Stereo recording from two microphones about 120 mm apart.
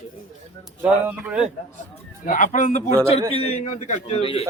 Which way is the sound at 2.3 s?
90° left.